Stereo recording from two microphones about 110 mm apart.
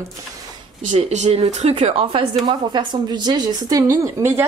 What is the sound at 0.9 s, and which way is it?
Speech, 80° right.